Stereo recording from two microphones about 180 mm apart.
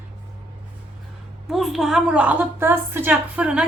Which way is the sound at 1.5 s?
Centre (ahead or behind).